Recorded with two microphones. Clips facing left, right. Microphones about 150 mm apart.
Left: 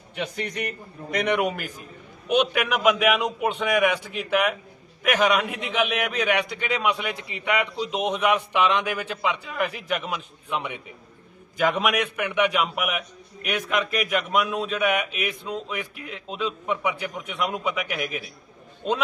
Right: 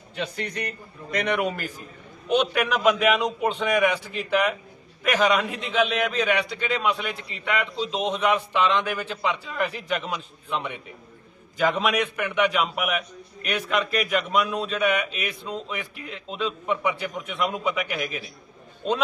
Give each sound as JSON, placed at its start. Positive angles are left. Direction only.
{"t": 0.2, "sound": "a man's voice", "side_deg": 15}